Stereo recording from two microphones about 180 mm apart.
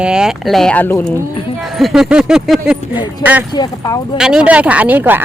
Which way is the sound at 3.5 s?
20° left (ahead or behind).